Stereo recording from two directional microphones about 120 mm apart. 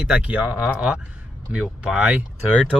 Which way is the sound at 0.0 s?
10° right (ahead or behind).